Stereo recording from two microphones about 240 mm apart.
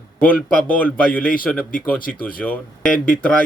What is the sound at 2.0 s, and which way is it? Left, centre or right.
Speech, left.